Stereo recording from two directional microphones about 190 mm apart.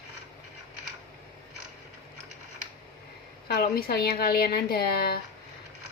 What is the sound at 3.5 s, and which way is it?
A woman's voice, 55° left (ahead or behind).